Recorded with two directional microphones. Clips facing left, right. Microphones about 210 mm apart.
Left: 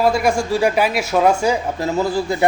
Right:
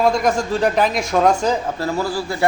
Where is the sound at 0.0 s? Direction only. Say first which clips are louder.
Left 1 dB; 5° left (ahead or behind).